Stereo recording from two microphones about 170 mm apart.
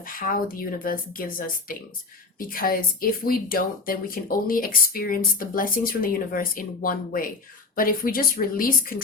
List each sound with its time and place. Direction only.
0.0 s speech: 55° left (ahead or behind)